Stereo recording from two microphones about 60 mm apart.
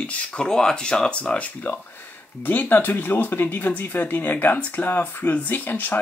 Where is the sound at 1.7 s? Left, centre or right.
Left.